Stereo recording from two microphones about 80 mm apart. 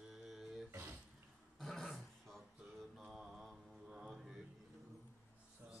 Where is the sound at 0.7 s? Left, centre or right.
Right.